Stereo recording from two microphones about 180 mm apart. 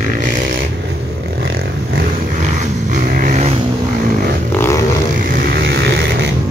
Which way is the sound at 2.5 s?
50° right (ahead or behind).